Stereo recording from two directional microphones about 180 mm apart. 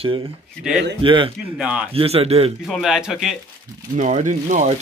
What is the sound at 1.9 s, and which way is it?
Speech, 35° right (ahead or behind).